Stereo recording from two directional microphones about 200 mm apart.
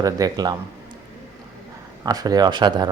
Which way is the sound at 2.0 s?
20° right (ahead or behind).